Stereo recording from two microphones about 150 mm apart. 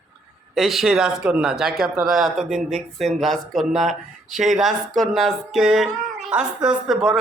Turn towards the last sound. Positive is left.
turn(degrees=0)  # may be behind; listen again after turning